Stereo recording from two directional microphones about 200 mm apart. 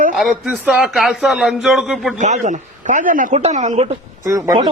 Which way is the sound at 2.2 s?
35° right (ahead or behind).